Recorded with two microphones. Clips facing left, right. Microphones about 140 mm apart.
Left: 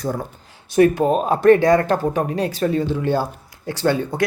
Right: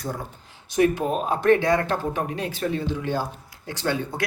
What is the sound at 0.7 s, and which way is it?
Speech, 60° left (ahead or behind).